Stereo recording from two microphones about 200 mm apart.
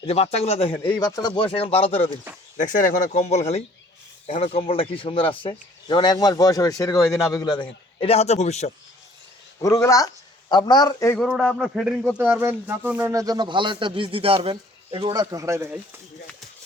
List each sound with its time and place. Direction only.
0.0 s speech: 30° left (ahead or behind)
0.8 s speech: 20° left (ahead or behind)
2.6 s speech: 40° left (ahead or behind)
9.6 s speech: 15° left (ahead or behind)
11.2 s speech: centre (ahead or behind)